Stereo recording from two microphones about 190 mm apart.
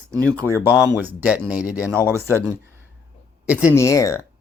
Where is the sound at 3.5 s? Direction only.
5° right (ahead or behind).